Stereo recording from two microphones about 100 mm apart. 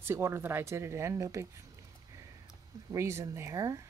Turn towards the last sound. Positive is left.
turn(degrees=-35)  # may be behind; listen again after turning